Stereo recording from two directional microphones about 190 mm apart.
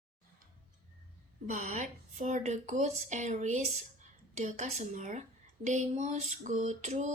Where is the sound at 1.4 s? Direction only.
40° right (ahead or behind).